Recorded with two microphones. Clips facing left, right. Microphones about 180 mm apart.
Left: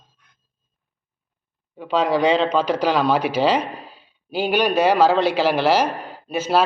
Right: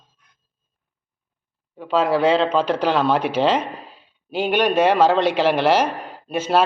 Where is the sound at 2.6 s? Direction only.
10° left (ahead or behind).